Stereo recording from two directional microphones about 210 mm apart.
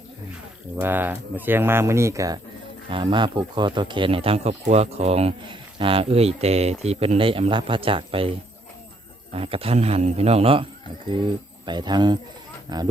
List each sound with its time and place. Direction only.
0.8 s speech: 10° right (ahead or behind)